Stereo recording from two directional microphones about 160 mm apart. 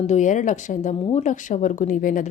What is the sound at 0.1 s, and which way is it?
Speech, 50° left (ahead or behind).